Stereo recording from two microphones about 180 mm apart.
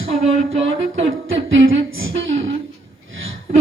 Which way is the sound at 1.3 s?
90° right.